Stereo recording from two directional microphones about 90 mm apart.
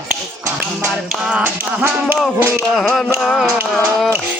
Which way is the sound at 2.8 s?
5° left (ahead or behind).